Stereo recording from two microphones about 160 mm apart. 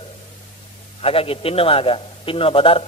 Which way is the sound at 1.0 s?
35° left (ahead or behind).